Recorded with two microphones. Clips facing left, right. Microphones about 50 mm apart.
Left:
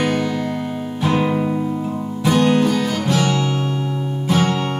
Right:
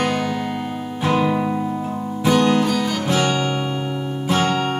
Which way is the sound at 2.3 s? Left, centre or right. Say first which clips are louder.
Left 2 dB; centre.